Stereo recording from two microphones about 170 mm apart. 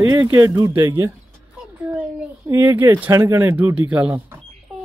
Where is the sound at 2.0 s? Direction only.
15° right (ahead or behind).